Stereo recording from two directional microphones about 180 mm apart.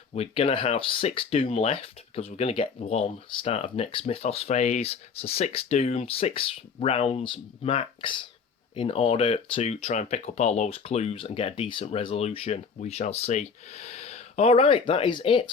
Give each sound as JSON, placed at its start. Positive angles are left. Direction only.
{"t": 0.1, "sound": "speech", "side_deg": 35}